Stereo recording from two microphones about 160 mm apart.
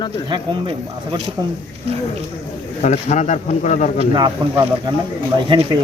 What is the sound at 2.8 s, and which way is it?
Speech, 45° left (ahead or behind).